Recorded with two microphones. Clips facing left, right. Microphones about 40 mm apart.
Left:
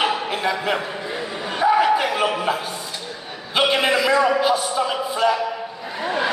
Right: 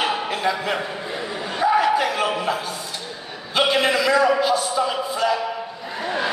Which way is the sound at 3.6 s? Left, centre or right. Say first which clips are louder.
Left 1 dB; centre.